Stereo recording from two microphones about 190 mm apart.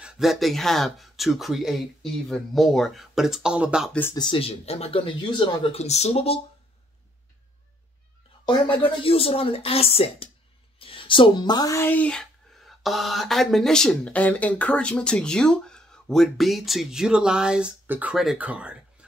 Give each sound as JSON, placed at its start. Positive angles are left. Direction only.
{"t": 0.0, "sound": "speech", "side_deg": 0}
{"t": 4.1, "sound": "speech", "side_deg": 25}
{"t": 8.5, "sound": "speech", "side_deg": 25}